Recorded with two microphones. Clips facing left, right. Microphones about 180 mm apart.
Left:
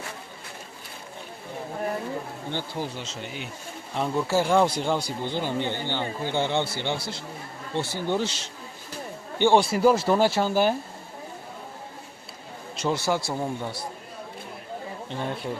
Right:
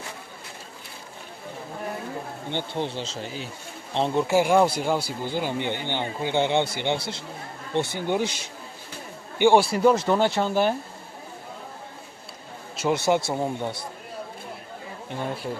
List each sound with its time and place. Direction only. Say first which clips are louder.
2.5 s speech: right 3 dB; 20° right (ahead or behind)
9.8 s speech: even; 5° left (ahead or behind)
12.9 s speech: right 4 dB; 20° right (ahead or behind)